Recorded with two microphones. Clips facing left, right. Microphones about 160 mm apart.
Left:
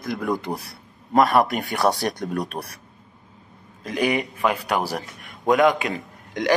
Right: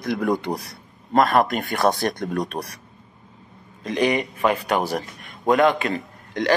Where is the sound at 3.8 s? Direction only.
5° left (ahead or behind).